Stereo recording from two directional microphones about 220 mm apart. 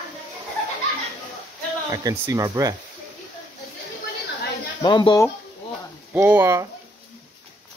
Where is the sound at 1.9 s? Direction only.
15° right (ahead or behind).